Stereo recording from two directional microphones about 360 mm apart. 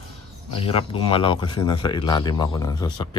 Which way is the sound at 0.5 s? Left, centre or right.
Centre.